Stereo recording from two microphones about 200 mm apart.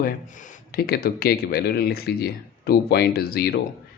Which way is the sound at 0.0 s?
40° left (ahead or behind).